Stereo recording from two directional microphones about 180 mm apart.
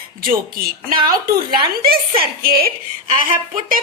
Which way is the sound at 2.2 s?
55° right (ahead or behind).